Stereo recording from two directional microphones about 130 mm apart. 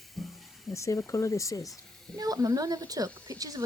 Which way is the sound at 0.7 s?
25° left (ahead or behind).